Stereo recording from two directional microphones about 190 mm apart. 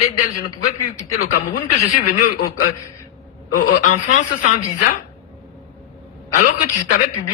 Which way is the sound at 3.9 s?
40° left (ahead or behind).